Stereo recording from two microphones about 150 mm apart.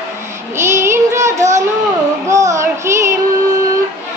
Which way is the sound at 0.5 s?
15° right (ahead or behind).